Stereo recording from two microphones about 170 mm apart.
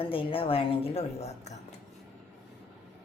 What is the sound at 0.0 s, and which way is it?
A woman's voice, 30° left (ahead or behind).